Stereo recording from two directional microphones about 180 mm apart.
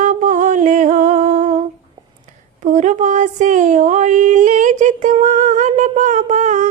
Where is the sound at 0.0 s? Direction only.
45° right (ahead or behind).